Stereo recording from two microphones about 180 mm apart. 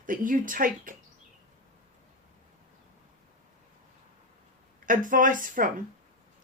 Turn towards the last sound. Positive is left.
turn(degrees=-50)  # may be behind; listen again after turning